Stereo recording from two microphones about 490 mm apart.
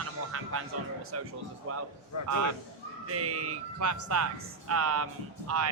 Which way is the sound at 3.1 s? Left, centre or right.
Right.